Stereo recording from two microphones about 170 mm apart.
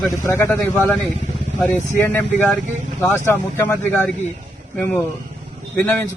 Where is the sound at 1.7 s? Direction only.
10° left (ahead or behind).